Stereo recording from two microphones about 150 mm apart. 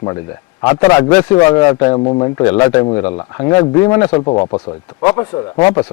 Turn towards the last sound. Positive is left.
turn(degrees=30)  # may be behind; listen again after turning